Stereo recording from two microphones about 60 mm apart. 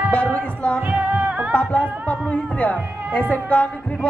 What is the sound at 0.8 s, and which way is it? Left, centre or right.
Music, right.